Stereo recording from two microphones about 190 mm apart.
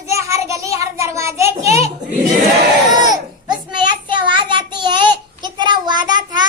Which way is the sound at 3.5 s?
25° right (ahead or behind).